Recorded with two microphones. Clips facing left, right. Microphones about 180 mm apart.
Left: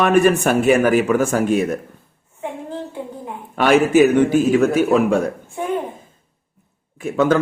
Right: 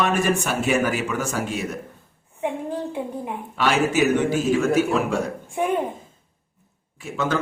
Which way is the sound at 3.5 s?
55° left (ahead or behind).